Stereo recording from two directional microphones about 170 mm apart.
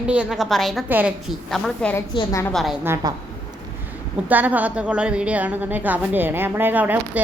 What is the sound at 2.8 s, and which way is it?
Speech, 20° right (ahead or behind).